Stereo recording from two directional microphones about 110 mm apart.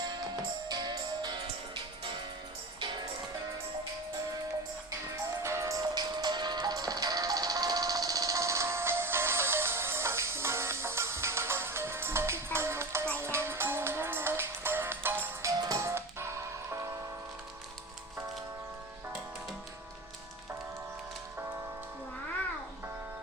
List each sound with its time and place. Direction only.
0.7 s music: 40° right (ahead or behind)
4.9 s music: 25° right (ahead or behind)